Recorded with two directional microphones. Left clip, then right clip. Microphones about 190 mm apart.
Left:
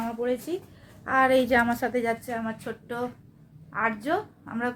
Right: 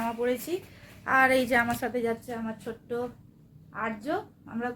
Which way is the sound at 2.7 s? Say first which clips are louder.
Left 1 dB; 30° left (ahead or behind).